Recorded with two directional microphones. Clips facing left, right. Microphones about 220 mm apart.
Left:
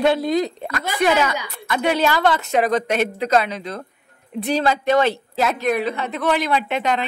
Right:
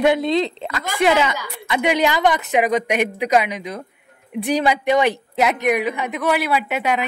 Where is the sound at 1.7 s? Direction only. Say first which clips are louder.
Right 1 dB; 15° right (ahead or behind).